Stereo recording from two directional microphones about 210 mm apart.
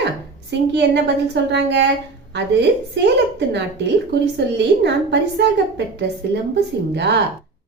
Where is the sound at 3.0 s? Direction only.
55° right (ahead or behind).